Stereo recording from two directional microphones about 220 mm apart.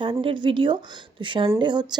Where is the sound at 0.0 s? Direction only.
25° right (ahead or behind).